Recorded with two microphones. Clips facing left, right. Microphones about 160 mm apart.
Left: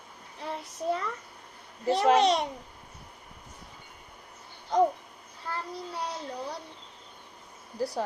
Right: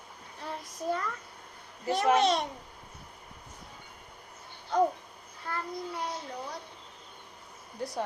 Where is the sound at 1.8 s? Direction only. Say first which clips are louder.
Left 3 dB; 30° left (ahead or behind).